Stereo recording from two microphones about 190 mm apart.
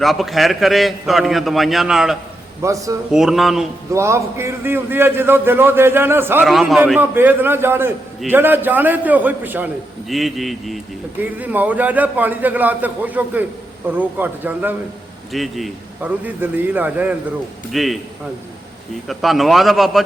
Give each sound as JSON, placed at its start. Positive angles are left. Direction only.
{"t": 0.0, "sound": "a man's voice", "side_deg": 0}
{"t": 2.6, "sound": "a man's voice", "side_deg": -15}
{"t": 3.1, "sound": "a man's voice", "side_deg": 0}
{"t": 3.9, "sound": "a man's voice", "side_deg": -15}
{"t": 6.4, "sound": "a man's voice", "side_deg": 0}
{"t": 19.0, "sound": "a man's voice", "side_deg": 0}